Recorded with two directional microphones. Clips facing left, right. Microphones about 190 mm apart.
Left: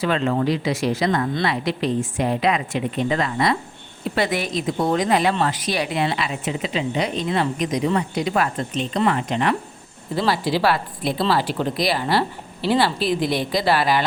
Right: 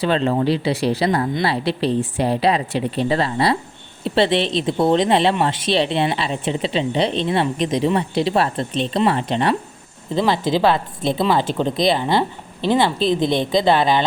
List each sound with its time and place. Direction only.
0.0 s a woman's voice: 30° right (ahead or behind)
10.2 s a woman's voice: 20° right (ahead or behind)